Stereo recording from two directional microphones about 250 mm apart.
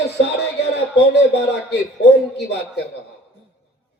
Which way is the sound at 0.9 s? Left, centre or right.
Left.